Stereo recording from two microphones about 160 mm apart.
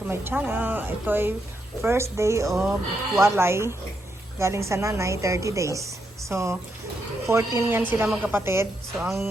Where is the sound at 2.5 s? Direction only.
5° right (ahead or behind).